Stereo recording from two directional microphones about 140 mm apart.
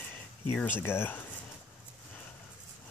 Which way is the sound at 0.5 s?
15° left (ahead or behind).